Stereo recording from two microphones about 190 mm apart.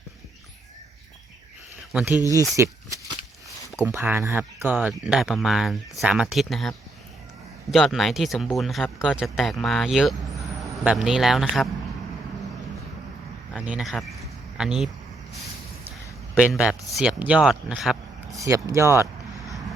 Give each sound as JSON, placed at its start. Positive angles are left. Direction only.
{"t": 1.9, "sound": "speech", "side_deg": -5}
{"t": 3.8, "sound": "speech", "side_deg": -10}
{"t": 13.7, "sound": "speech", "side_deg": 0}
{"t": 16.4, "sound": "speech", "side_deg": -5}
{"t": 18.3, "sound": "speech", "side_deg": -15}